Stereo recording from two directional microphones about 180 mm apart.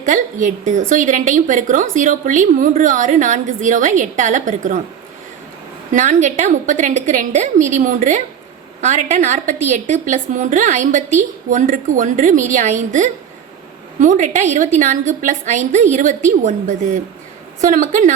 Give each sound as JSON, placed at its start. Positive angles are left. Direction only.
{"t": 0.0, "sound": "a woman's voice", "side_deg": -45}
{"t": 5.9, "sound": "a woman's voice", "side_deg": -45}